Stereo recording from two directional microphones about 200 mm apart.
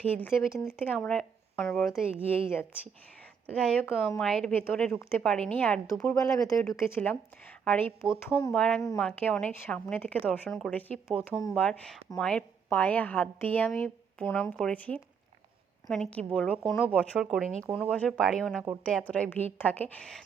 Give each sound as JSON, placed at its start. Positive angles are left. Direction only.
{"t": 0.0, "sound": "a woman's voice", "side_deg": 10}
{"t": 0.9, "sound": "a woman's voice", "side_deg": 5}
{"t": 3.5, "sound": "a woman's voice", "side_deg": 5}
{"t": 8.5, "sound": "a woman's voice", "side_deg": 5}
{"t": 11.5, "sound": "a woman's voice", "side_deg": 5}